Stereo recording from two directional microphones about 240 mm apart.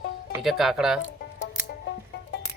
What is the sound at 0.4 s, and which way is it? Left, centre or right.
Speech, centre.